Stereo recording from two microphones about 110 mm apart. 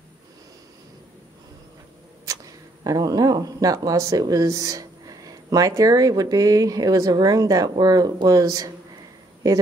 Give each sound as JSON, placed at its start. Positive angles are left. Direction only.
{"t": 2.8, "sound": "speech", "side_deg": -35}